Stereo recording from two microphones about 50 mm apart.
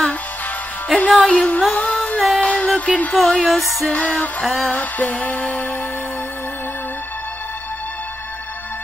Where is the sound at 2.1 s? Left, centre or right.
Centre.